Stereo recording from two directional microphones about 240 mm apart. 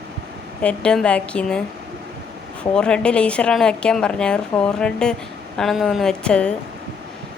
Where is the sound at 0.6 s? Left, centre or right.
Centre.